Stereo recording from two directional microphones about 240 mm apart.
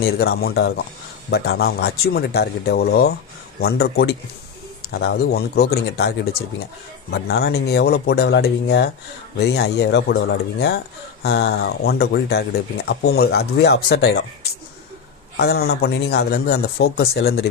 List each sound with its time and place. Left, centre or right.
0.0 s speech: left
15.4 s speech: left